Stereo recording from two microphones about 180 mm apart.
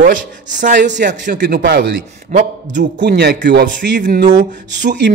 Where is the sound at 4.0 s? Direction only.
45° right (ahead or behind).